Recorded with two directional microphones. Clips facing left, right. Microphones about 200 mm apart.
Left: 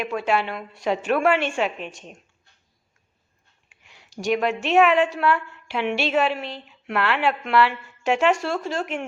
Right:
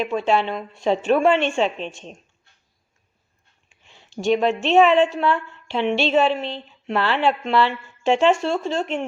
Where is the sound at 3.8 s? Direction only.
25° right (ahead or behind).